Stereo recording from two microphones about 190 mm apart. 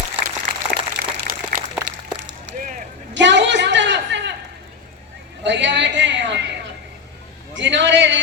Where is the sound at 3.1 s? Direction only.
70° right (ahead or behind).